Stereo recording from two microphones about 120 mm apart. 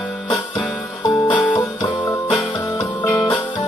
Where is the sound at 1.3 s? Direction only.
40° left (ahead or behind).